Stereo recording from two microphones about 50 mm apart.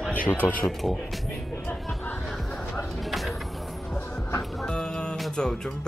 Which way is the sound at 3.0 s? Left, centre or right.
Centre.